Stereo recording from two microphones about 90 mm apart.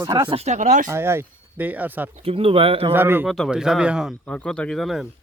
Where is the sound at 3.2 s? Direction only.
5° left (ahead or behind).